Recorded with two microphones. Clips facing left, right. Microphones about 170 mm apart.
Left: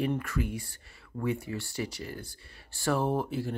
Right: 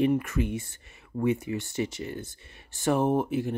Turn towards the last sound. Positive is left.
turn(degrees=-20)  # may be behind; listen again after turning